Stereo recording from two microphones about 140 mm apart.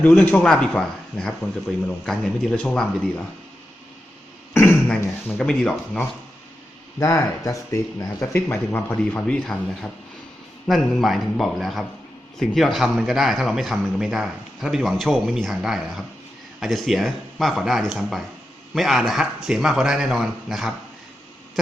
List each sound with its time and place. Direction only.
0.2 s a man's voice: 10° left (ahead or behind)
4.5 s beatboxing: 15° left (ahead or behind)
5.4 s a man's voice: 5° left (ahead or behind)
7.0 s a man's voice: 25° left (ahead or behind); by 20.7 s centre (ahead or behind)